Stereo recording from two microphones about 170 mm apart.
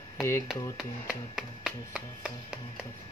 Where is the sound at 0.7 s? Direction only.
5° right (ahead or behind).